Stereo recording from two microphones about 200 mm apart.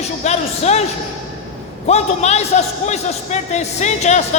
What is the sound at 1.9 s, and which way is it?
A man's voice, 35° left (ahead or behind).